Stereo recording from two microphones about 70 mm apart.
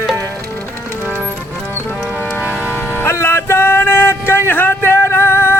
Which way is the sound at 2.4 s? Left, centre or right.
Right.